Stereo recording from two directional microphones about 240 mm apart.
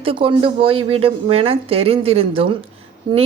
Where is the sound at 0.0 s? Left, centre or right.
Right.